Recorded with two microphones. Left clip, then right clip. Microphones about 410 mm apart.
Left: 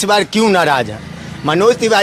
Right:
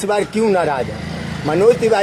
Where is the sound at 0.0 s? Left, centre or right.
Left.